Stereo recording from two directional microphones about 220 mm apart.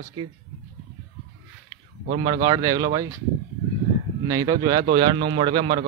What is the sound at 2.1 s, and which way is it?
Speech, 20° right (ahead or behind).